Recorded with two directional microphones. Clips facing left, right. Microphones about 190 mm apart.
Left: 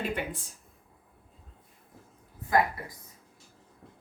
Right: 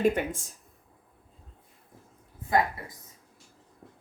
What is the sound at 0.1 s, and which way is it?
Speech, 45° right (ahead or behind).